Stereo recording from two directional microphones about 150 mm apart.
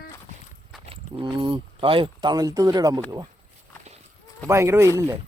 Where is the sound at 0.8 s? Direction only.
30° right (ahead or behind).